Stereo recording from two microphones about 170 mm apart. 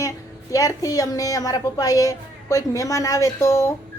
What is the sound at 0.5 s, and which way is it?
A woman's voice, 20° left (ahead or behind).